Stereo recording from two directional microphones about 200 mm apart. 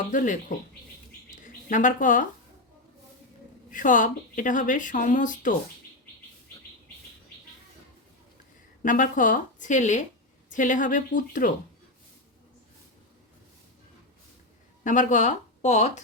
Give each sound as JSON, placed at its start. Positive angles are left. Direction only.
{"t": 0.1, "sound": "speech", "side_deg": 40}
{"t": 1.3, "sound": "a sound", "side_deg": 40}
{"t": 3.7, "sound": "speech", "side_deg": 40}
{"t": 8.8, "sound": "speech", "side_deg": 40}
{"t": 14.8, "sound": "speech", "side_deg": 40}